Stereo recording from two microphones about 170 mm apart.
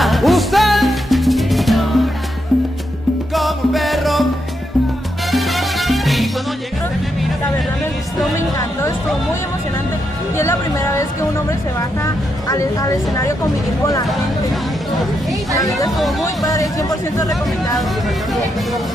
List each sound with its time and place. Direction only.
0.0 s music: centre (ahead or behind)
5.3 s salsa music: centre (ahead or behind)
10.3 s music: 15° left (ahead or behind)
15.5 s speech: 20° left (ahead or behind)
16.4 s chatter: 20° left (ahead or behind)
17.7 s speech: centre (ahead or behind)